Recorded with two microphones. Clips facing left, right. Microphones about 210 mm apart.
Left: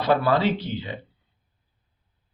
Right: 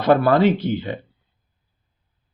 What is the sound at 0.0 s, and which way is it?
Speech, 50° right (ahead or behind).